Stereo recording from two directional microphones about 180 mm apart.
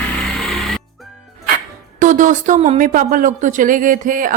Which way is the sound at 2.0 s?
45° right (ahead or behind).